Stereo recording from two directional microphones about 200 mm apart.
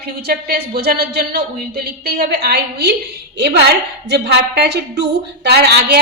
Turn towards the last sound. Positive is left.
turn(degrees=-55)  # may be behind; listen again after turning